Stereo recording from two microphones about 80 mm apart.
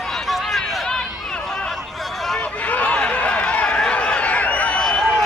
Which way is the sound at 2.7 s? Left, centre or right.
Centre.